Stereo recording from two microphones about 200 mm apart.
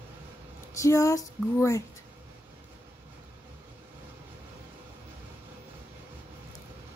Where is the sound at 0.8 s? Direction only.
15° left (ahead or behind).